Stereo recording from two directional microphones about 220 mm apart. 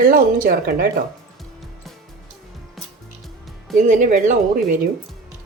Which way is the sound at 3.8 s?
35° right (ahead or behind).